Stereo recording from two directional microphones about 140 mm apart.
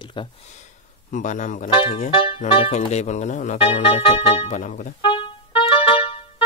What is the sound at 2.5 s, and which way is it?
Speech, 50° left (ahead or behind).